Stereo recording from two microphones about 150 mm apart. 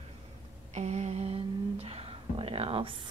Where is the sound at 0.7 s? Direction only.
45° right (ahead or behind).